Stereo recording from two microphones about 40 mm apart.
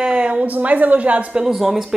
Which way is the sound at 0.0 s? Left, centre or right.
Right.